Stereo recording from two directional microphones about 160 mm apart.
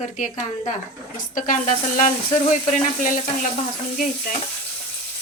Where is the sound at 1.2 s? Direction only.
55° left (ahead or behind).